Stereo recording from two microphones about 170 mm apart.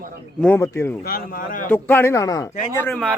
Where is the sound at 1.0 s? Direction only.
60° left (ahead or behind).